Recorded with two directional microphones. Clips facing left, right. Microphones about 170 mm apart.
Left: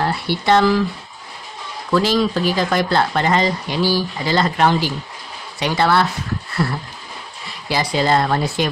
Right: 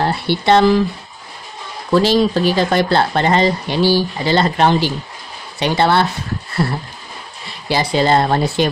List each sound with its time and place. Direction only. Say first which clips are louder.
0.0 s speech: right 3 dB; 25° right (ahead or behind)
1.9 s speech: right 3 dB; 25° right (ahead or behind)
6.5 s a sound: right 3 dB; 30° right (ahead or behind)
7.4 s speech: right 3 dB; 30° right (ahead or behind)